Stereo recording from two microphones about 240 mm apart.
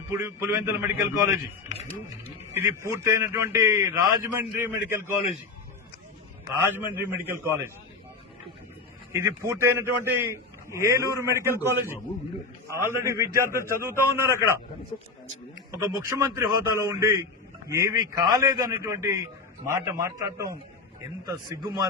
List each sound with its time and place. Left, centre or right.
0.1 s a man's voice: centre
2.6 s a man's voice: centre
6.7 s a man's voice: centre
9.1 s a man's voice: centre
15.7 s a man's voice: centre